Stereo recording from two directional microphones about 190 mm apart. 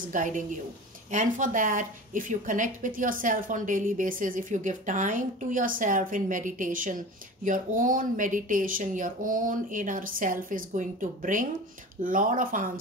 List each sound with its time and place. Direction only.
0.0 s a woman's voice: 45° right (ahead or behind)